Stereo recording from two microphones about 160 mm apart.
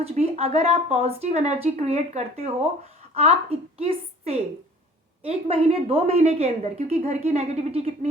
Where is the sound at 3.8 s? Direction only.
40° right (ahead or behind).